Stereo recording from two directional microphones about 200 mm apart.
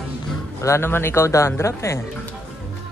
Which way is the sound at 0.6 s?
15° left (ahead or behind).